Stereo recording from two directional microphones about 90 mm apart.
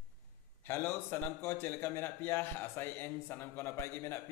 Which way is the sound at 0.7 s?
25° left (ahead or behind).